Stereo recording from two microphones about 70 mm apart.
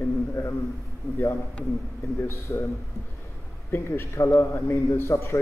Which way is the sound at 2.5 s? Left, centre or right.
Left.